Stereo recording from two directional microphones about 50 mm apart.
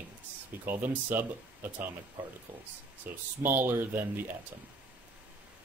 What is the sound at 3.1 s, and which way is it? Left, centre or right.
Speech, right.